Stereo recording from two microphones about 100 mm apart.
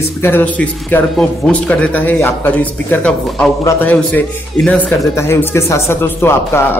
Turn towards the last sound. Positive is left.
turn(degrees=25)  # may be behind; listen again after turning